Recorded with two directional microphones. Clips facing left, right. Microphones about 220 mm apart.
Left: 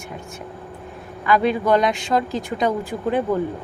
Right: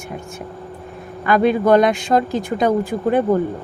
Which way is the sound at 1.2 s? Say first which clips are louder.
Right 4 dB; 50° right (ahead or behind).